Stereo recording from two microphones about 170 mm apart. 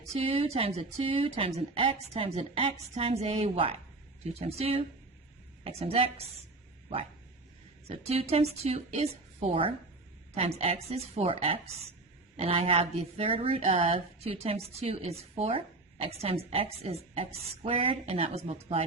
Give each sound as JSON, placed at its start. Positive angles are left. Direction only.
{"t": 0.1, "sound": "speech", "side_deg": -35}